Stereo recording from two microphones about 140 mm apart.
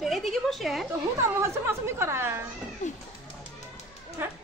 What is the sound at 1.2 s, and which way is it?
A woman's voice, 20° right (ahead or behind).